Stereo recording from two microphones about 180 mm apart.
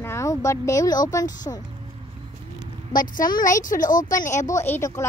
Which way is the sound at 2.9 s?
50° left (ahead or behind).